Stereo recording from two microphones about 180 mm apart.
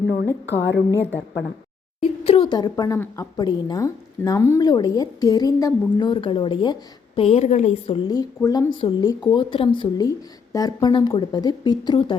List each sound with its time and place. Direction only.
0.0 s a woman's voice: 65° left (ahead or behind)
0.4 s a woman's voice: 80° left
2.2 s a woman's voice: 30° left (ahead or behind)
8.4 s a woman's voice: 15° left (ahead or behind)